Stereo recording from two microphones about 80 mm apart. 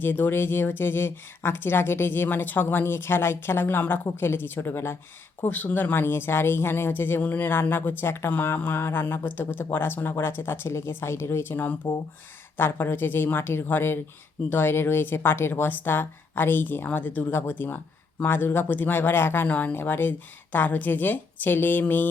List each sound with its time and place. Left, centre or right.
0.0 s speech: left